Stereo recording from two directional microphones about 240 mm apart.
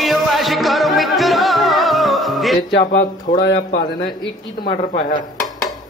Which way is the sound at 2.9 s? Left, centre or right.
Left.